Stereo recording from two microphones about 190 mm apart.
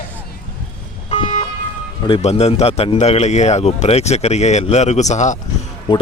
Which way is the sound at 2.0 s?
30° left (ahead or behind).